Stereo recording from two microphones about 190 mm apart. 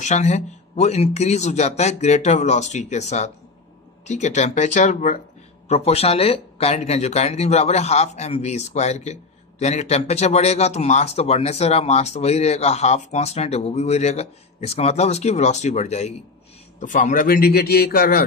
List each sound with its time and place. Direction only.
0.0 s a man's voice: 35° left (ahead or behind); by 18.2 s 50° left (ahead or behind)